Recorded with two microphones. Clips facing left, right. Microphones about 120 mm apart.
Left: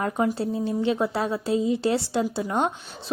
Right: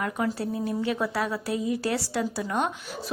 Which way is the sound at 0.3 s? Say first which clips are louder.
Left 3 dB; 25° left (ahead or behind).